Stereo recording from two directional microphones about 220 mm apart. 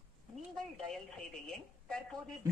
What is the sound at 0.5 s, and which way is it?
Speech, centre (ahead or behind).